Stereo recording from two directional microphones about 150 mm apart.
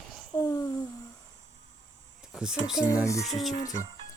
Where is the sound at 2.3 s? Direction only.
5° right (ahead or behind).